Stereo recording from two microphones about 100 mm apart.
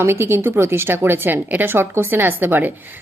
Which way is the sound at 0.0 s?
25° right (ahead or behind).